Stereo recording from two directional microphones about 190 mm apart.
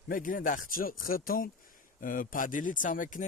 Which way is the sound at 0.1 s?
45° left (ahead or behind).